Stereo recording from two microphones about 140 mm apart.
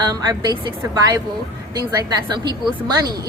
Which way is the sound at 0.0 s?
30° right (ahead or behind).